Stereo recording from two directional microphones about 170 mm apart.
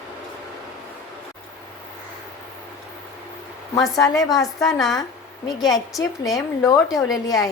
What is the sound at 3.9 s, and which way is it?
Speech, 20° left (ahead or behind).